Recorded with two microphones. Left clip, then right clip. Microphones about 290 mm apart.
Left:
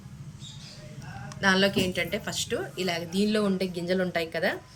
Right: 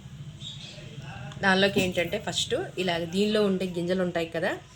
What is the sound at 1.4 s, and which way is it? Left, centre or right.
A woman's voice, centre.